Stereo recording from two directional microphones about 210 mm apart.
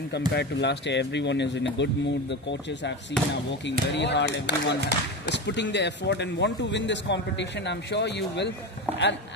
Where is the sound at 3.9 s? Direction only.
55° left (ahead or behind).